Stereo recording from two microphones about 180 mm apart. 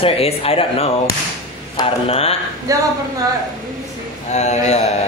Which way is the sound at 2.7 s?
20° right (ahead or behind).